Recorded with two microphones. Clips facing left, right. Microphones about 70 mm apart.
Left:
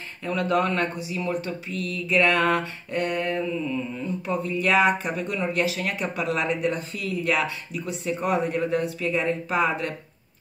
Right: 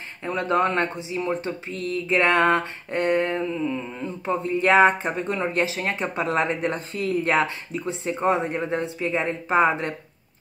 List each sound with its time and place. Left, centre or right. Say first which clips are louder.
0.2 s speech: right 1 dB; right